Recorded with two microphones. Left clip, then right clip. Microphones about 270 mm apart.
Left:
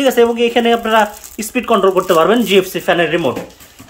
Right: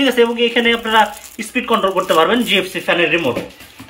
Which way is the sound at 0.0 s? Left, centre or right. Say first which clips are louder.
Left 2 dB; left.